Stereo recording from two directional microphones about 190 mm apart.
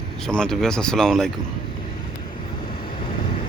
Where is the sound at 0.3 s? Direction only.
5° left (ahead or behind).